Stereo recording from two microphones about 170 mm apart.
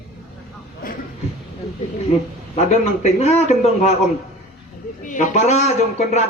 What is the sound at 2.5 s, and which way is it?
A man's voice, 40° left (ahead or behind).